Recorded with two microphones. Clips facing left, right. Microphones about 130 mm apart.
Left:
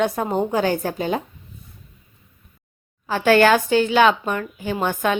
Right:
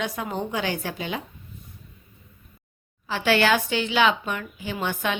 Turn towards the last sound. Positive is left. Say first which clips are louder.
# left 6 dB
turn(degrees=45)  # may be behind; listen again after turning